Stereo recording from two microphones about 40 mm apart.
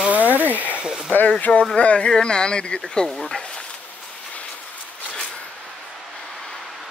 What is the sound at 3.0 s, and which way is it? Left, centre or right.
Speech, centre.